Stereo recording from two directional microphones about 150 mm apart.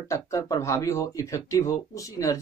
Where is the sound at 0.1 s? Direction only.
20° left (ahead or behind).